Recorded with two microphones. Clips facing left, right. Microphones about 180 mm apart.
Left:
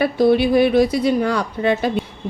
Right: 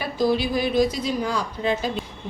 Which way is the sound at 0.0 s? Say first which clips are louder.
Left 7 dB; 60° left (ahead or behind).